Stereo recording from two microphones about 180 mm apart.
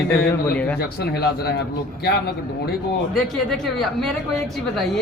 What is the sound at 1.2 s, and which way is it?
Speech, 60° left (ahead or behind).